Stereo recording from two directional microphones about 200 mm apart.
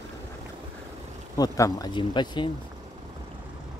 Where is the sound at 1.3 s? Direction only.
15° left (ahead or behind).